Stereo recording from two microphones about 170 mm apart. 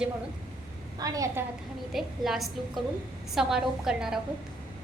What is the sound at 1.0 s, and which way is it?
Speech, 20° right (ahead or behind).